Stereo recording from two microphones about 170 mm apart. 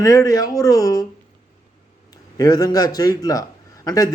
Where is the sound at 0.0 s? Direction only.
20° left (ahead or behind).